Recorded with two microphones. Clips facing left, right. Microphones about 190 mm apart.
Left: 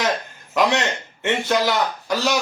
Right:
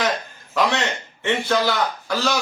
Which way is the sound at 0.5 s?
15° left (ahead or behind).